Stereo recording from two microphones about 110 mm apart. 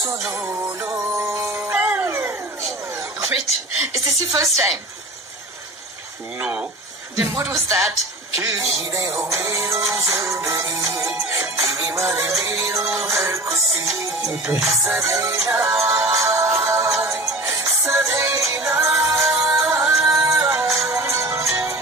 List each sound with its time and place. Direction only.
0.4 s music: 20° right (ahead or behind)
3.3 s speech: 70° left (ahead or behind)
4.3 s music: 30° right (ahead or behind)
7.3 s music: 25° right (ahead or behind)